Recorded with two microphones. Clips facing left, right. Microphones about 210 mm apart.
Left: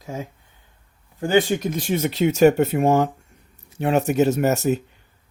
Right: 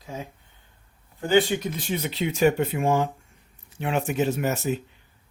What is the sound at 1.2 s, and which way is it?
Speech, 45° left (ahead or behind).